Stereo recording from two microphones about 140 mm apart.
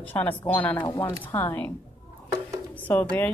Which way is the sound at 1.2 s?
15° left (ahead or behind).